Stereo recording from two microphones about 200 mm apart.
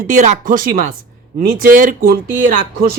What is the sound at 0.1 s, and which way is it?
Speech, 40° right (ahead or behind).